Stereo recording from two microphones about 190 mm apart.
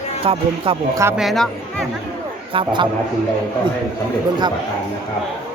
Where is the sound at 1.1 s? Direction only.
Centre (ahead or behind).